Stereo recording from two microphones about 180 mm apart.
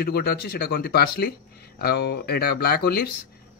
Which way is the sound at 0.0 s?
60° left (ahead or behind).